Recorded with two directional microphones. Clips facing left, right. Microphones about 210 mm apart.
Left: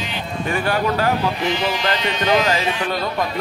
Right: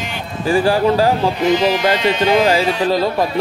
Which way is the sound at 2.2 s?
30° right (ahead or behind).